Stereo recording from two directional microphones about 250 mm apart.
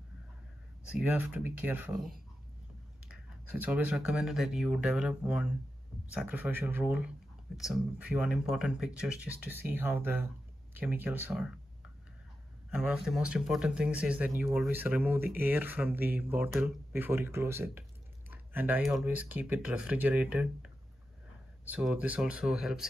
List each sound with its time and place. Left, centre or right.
0.9 s speech: centre
3.6 s speech: centre
12.7 s speech: centre